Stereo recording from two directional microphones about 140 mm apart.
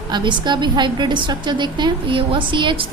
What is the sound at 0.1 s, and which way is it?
A woman's voice, 35° right (ahead or behind).